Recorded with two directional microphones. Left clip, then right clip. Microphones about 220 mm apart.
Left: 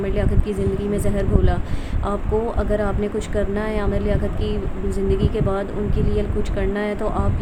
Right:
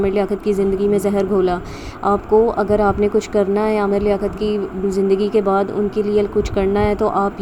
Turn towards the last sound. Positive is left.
turn(degrees=-15)  # may be behind; listen again after turning